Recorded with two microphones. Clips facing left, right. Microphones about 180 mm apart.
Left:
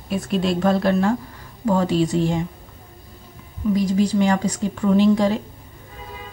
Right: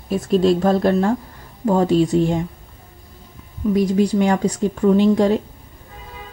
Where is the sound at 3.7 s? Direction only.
60° right (ahead or behind).